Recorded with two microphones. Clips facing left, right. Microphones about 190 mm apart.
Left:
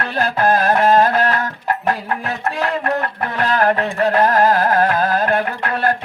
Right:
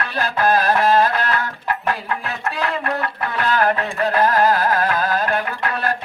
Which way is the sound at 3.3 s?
40° left (ahead or behind).